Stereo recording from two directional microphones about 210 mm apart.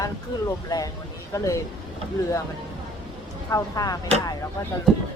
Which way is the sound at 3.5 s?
15° left (ahead or behind).